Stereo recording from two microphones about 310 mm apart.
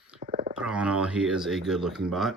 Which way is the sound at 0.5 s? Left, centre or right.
Centre.